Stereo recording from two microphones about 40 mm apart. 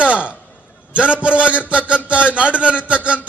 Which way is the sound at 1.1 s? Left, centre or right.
Right.